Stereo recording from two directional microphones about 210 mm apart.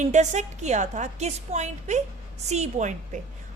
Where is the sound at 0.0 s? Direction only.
35° right (ahead or behind).